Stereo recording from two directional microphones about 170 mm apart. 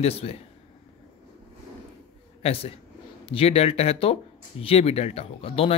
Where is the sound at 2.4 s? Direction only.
35° left (ahead or behind).